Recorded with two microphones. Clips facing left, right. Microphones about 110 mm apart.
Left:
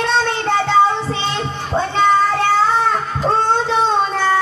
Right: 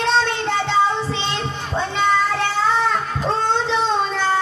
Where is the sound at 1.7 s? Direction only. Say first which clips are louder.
Left 5 dB; 45° left (ahead or behind).